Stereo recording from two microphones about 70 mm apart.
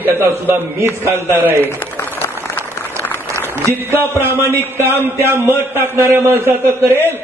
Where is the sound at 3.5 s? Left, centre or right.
Right.